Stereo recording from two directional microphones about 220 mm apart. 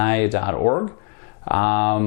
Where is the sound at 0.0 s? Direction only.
15° left (ahead or behind).